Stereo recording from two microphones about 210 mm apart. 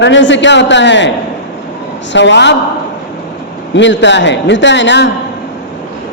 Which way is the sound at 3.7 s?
60° left (ahead or behind).